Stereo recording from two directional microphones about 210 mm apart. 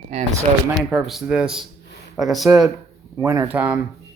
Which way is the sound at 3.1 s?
15° right (ahead or behind).